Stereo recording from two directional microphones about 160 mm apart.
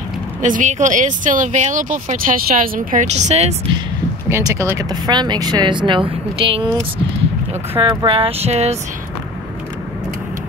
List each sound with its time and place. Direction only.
0.4 s speech: 50° right (ahead or behind)
4.3 s speech: 20° right (ahead or behind)
7.8 s a sound: 30° right (ahead or behind)